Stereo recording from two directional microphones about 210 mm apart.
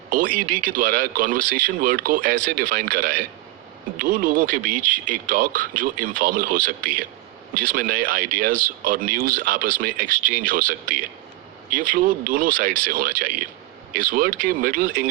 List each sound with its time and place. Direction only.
0.1 s speech: 40° right (ahead or behind)